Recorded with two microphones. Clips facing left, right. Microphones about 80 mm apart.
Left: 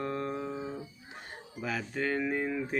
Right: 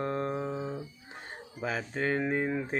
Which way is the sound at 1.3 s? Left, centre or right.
Right.